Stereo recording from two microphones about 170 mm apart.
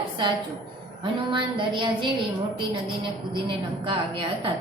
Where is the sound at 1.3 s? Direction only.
30° right (ahead or behind).